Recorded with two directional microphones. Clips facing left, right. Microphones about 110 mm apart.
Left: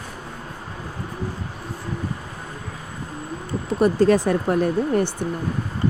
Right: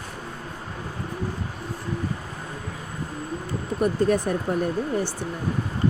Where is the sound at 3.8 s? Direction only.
90° left.